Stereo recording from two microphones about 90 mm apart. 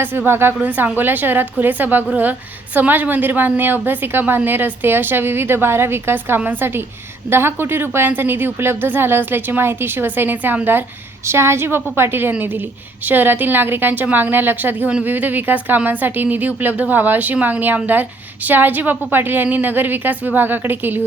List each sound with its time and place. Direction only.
0.3 s a woman's voice: 25° right (ahead or behind)